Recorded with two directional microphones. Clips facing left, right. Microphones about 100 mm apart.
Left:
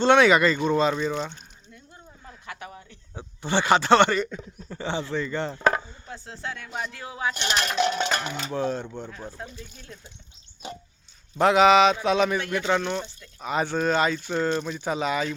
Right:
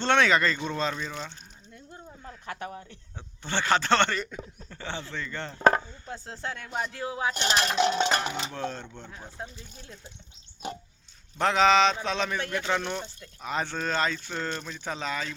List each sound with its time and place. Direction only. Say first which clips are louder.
0.0 s speech: left 5 dB; 10° left (ahead or behind)
2.5 s speech: right 3 dB; 45° right (ahead or behind)
3.2 s speech: left 6 dB; 15° left (ahead or behind)
5.5 s speech: right 4 dB; 40° right (ahead or behind)
6.7 s cutlery: right 4 dB; 35° right (ahead or behind)
8.5 s speech: left 7 dB; 15° left (ahead or behind)
9.0 s speech: left 3 dB; 15° right (ahead or behind)
9.5 s cutlery: left 4 dB; 30° right (ahead or behind)
11.3 s speech: left 4 dB; 10° left (ahead or behind)
12.7 s speech: left 4 dB; centre (ahead or behind)